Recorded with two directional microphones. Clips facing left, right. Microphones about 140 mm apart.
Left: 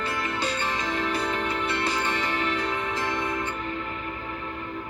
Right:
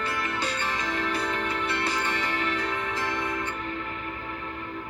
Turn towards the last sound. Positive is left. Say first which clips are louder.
# left 2 dB
turn(degrees=25)  # may be behind; listen again after turning